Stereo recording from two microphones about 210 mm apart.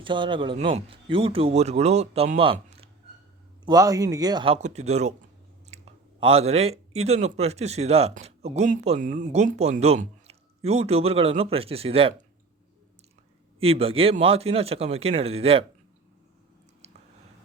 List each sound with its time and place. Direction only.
0.0 s speech: 25° right (ahead or behind)
2.4 s a sound: 25° right (ahead or behind)
3.7 s speech: 15° right (ahead or behind)
13.6 s speech: 25° right (ahead or behind)